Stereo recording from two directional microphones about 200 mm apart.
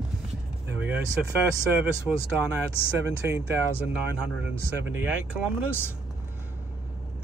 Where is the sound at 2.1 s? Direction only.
5° right (ahead or behind).